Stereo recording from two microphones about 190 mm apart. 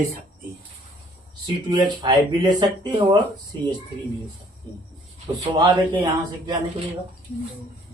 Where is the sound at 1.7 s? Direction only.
20° right (ahead or behind).